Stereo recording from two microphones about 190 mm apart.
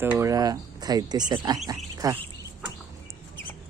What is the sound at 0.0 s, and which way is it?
Speech, 10° right (ahead or behind).